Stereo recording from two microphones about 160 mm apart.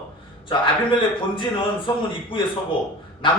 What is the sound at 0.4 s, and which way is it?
Speech, 30° left (ahead or behind).